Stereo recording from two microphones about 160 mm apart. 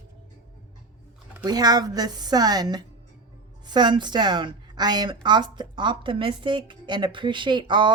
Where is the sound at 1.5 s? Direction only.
25° right (ahead or behind).